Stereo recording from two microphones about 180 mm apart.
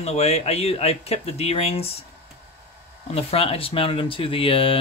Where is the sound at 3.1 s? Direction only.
35° left (ahead or behind).